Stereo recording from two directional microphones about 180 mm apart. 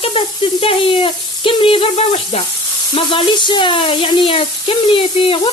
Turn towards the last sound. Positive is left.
turn(degrees=30)  # may be behind; listen again after turning